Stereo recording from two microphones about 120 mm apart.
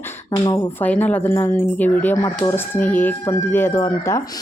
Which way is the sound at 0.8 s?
15° left (ahead or behind).